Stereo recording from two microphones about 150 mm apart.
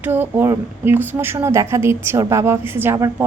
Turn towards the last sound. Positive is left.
turn(degrees=-20)  # may be behind; listen again after turning